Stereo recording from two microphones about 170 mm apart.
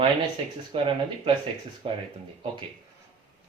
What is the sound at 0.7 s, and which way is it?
Speech, 35° right (ahead or behind).